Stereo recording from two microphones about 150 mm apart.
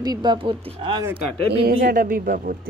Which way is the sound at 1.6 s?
70° right (ahead or behind).